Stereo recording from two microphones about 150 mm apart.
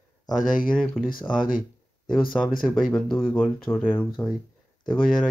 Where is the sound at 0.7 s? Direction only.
Centre (ahead or behind).